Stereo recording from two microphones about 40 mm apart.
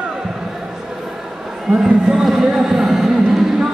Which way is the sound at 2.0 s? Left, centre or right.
Centre.